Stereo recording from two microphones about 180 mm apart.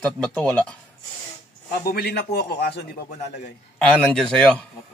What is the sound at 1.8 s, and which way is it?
A man's voice, 60° left (ahead or behind).